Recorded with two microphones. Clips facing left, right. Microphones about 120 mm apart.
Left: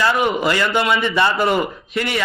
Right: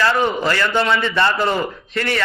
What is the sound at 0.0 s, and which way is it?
A man's voice, 10° left (ahead or behind).